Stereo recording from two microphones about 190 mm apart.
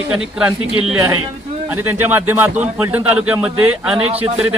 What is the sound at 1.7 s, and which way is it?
A man's voice, 10° right (ahead or behind).